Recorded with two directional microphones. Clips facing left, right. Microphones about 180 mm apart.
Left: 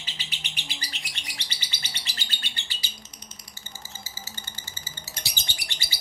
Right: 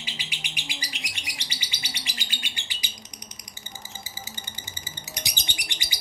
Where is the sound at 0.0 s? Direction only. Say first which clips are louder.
Right 3 dB; 10° right (ahead or behind).